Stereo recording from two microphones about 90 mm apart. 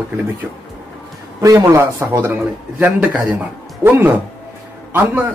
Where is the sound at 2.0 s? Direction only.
25° right (ahead or behind).